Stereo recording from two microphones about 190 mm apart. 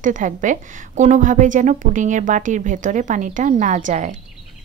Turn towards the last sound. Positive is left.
turn(degrees=-40)  # may be behind; listen again after turning